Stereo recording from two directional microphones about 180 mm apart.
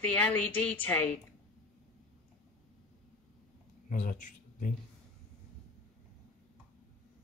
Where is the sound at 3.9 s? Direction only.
45° left (ahead or behind).